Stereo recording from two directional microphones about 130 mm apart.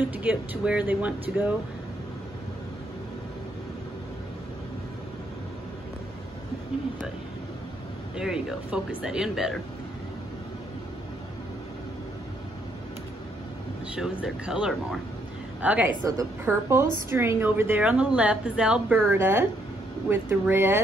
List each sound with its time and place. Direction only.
0.1 s a woman's voice: 10° right (ahead or behind)
8.2 s speech: 5° right (ahead or behind)
13.9 s a woman's voice: 5° right (ahead or behind)